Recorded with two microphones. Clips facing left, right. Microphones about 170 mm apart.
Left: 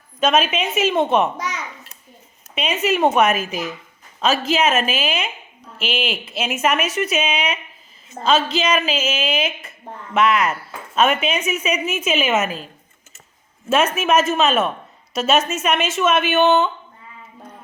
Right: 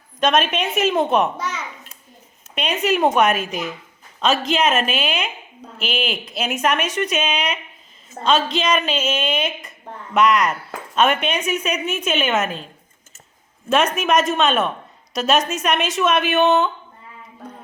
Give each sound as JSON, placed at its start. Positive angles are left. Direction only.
{"t": 0.2, "sound": "a woman's voice", "side_deg": 5}
{"t": 2.8, "sound": "a woman's voice", "side_deg": 0}